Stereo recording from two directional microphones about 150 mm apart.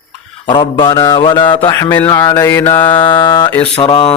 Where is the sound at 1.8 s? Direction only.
20° left (ahead or behind).